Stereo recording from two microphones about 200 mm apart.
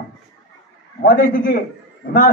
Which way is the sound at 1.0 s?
45° left (ahead or behind).